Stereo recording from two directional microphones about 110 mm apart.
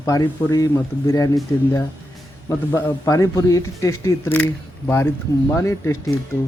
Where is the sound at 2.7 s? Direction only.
20° left (ahead or behind).